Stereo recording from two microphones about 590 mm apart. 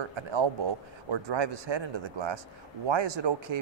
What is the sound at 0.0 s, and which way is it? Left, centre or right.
Speech, right.